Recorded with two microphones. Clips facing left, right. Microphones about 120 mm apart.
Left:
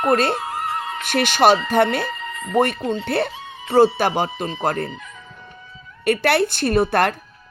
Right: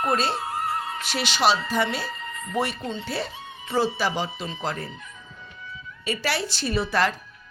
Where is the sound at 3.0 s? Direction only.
60° left (ahead or behind); by 3.7 s 90° left.